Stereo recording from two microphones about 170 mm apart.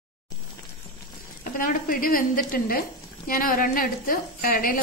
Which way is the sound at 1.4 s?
55° left (ahead or behind).